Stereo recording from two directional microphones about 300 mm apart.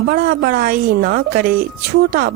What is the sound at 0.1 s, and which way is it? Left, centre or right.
Speech, right.